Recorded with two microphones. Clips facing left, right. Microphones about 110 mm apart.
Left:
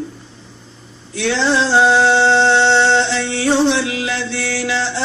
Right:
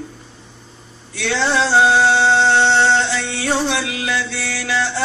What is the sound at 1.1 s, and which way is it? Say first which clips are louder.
Chant: left 2 dB; 30° left (ahead or behind).